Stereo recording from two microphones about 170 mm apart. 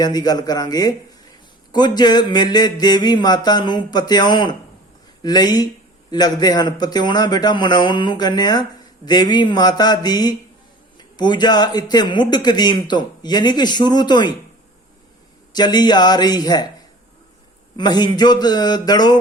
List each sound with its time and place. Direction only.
0.0 s speech: 25° left (ahead or behind)
15.5 s speech: 25° left (ahead or behind)
17.7 s speech: 25° left (ahead or behind)